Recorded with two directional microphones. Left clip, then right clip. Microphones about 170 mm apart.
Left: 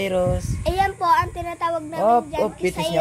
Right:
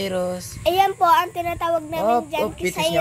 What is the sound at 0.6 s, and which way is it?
A child's voice, 40° right (ahead or behind).